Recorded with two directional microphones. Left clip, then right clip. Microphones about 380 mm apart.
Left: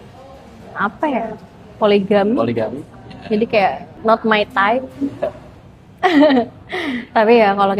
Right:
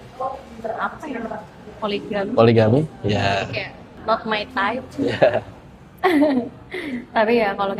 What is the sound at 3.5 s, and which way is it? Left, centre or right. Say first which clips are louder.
A woman's voice: left 14 dB; left.